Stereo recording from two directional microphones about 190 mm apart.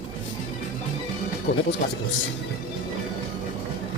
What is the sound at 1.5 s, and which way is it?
Speech, 65° left (ahead or behind).